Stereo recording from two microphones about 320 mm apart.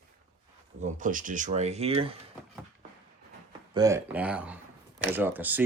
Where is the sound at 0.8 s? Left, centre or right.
Right.